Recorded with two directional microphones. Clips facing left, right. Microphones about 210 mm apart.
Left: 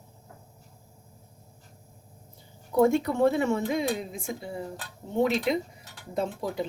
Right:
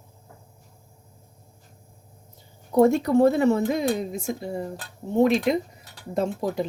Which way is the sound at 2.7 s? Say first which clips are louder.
Right 4 dB; 40° right (ahead or behind).